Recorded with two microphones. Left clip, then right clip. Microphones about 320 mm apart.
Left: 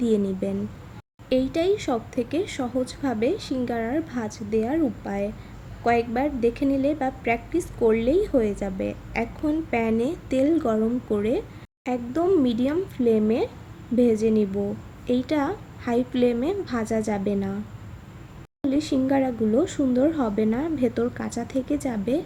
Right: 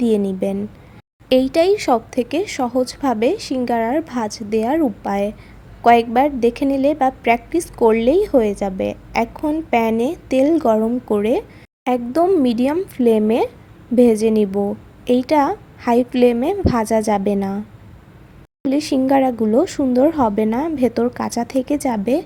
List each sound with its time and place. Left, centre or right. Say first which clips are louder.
0.4 s a woman's voice: right 7 dB; centre
18.7 s a woman's voice: right 7 dB; right